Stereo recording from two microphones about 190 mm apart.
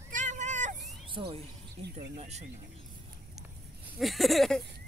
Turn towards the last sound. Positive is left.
turn(degrees=0)  # may be behind; listen again after turning